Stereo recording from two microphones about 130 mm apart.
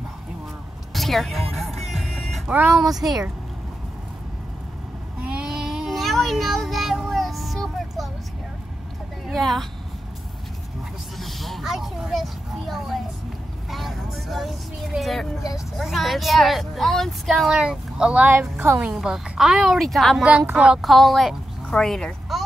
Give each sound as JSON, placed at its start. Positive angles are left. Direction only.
{"t": 0.9, "sound": "music", "side_deg": 0}
{"t": 2.5, "sound": "speech", "side_deg": -15}
{"t": 2.8, "sound": "speech", "side_deg": -30}
{"t": 5.2, "sound": "a sound", "side_deg": -5}
{"t": 9.3, "sound": "speech", "side_deg": 0}
{"t": 11.1, "sound": "a sound", "side_deg": 0}
{"t": 13.7, "sound": "vehicle", "side_deg": 0}
{"t": 15.8, "sound": "speech", "side_deg": 0}
{"t": 18.9, "sound": "speech", "side_deg": -5}